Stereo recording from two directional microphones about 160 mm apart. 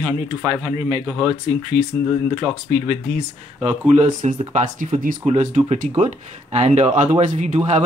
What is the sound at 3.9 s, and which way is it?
Speech, 45° right (ahead or behind).